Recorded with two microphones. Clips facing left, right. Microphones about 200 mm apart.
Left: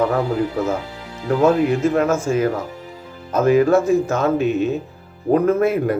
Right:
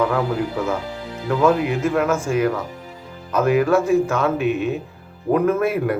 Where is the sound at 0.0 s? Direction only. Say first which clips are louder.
Left 1 dB; 40° left (ahead or behind).